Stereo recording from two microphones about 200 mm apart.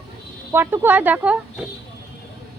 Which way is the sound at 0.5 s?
10° right (ahead or behind).